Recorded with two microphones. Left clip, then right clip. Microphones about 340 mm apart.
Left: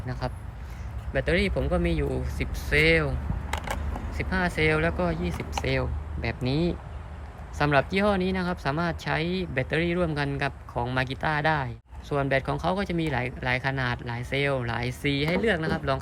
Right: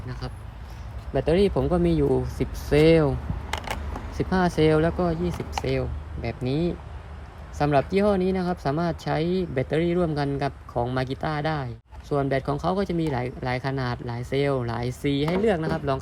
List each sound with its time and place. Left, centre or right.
0.2 s speech: centre
3.5 s a sound: centre
4.1 s speech: centre